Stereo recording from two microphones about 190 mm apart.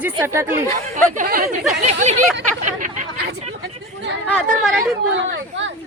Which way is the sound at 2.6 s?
40° right (ahead or behind).